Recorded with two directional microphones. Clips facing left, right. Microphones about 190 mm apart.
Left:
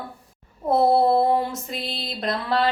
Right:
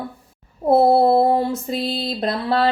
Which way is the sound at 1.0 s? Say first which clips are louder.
Right 3 dB; 30° right (ahead or behind).